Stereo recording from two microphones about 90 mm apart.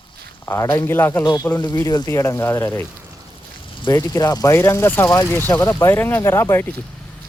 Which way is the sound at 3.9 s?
40° left (ahead or behind).